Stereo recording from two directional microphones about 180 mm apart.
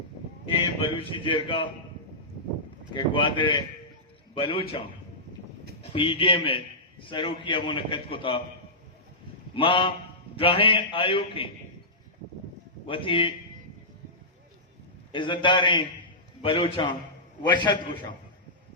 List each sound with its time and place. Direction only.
0.5 s a man's voice: 30° left (ahead or behind)
2.9 s a man's voice: 25° left (ahead or behind)
5.8 s a man's voice: 30° left (ahead or behind)
9.6 s a man's voice: 30° left (ahead or behind)
12.9 s a man's voice: 30° left (ahead or behind)
15.1 s a man's voice: 25° left (ahead or behind)